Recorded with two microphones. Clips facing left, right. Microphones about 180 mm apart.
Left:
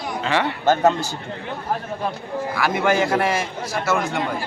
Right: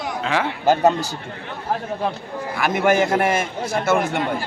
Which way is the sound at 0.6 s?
15° right (ahead or behind).